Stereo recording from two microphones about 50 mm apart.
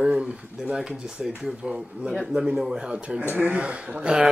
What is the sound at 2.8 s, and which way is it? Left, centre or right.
Speech, centre.